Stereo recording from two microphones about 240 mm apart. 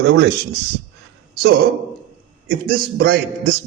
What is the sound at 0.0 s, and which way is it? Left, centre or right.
Speech, right.